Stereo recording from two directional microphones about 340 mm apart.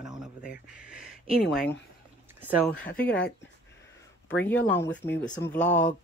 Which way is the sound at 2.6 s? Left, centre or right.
Centre.